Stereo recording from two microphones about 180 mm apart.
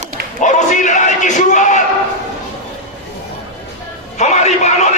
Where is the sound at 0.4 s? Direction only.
45° left (ahead or behind).